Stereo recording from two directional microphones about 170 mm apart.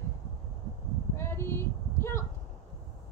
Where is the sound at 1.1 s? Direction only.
15° left (ahead or behind).